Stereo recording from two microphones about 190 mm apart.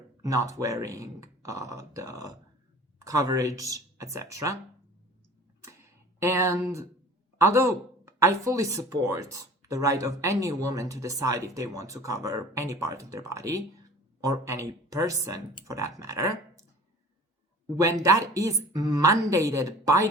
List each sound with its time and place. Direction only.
0.2 s speech: 15° right (ahead or behind)
6.2 s speech: 15° right (ahead or behind)
17.7 s speech: 15° right (ahead or behind)